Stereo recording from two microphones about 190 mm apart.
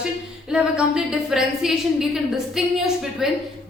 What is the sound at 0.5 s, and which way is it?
A woman's voice, 5° right (ahead or behind).